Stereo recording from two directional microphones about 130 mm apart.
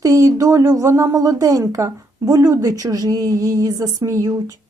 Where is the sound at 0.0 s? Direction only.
25° right (ahead or behind).